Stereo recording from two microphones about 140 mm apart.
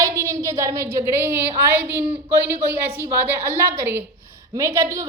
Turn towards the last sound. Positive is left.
turn(degrees=-20)  # may be behind; listen again after turning